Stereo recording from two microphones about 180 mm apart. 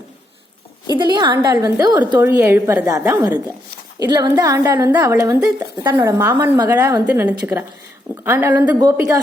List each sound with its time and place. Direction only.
0.9 s a woman's voice: 25° right (ahead or behind)
4.0 s a woman's voice: 20° right (ahead or behind)